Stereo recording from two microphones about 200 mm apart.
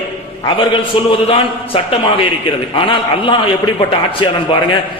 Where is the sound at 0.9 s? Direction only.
25° left (ahead or behind).